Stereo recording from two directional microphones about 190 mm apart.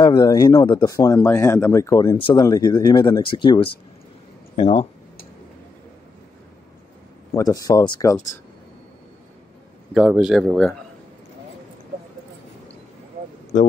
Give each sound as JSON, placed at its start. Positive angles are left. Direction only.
{"t": 0.0, "sound": "speech", "side_deg": 20}
{"t": 7.3, "sound": "speech", "side_deg": 20}
{"t": 9.9, "sound": "speech", "side_deg": -5}